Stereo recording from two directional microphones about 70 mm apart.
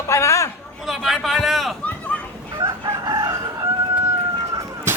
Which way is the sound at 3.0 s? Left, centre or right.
Right.